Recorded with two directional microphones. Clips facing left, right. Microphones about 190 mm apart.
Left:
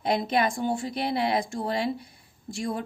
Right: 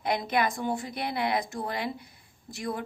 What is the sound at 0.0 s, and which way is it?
Speech, 25° left (ahead or behind).